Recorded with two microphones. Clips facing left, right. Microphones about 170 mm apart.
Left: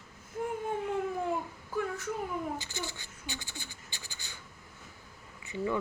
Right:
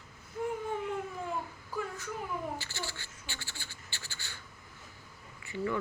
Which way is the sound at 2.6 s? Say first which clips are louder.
Left 2 dB; 15° left (ahead or behind).